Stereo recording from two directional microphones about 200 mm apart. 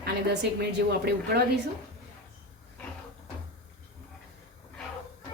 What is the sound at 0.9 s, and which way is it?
Speech, 55° right (ahead or behind).